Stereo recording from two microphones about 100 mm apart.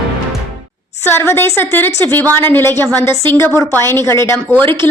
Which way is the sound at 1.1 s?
25° left (ahead or behind).